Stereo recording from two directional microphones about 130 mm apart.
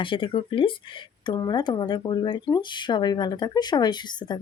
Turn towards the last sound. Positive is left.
turn(degrees=35)  # may be behind; listen again after turning